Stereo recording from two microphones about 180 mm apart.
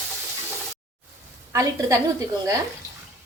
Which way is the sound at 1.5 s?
20° right (ahead or behind).